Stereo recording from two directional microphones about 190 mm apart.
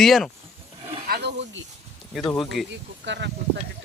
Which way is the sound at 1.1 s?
60° right (ahead or behind).